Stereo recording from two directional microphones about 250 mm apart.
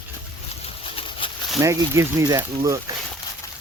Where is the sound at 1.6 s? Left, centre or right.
Centre.